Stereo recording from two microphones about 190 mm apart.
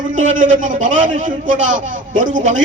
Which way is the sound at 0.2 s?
40° right (ahead or behind).